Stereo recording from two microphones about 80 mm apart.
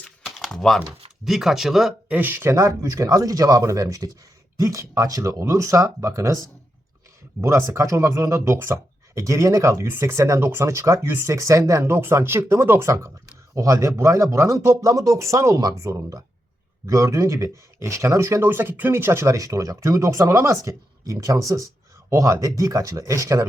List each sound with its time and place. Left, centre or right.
0.3 s typing: centre
1.2 s speech: centre
2.0 s speech: right
7.4 s speech: right
13.6 s speech: right